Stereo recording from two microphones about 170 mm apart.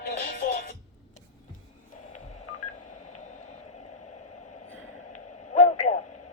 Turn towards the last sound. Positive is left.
turn(degrees=45)  # may be behind; listen again after turning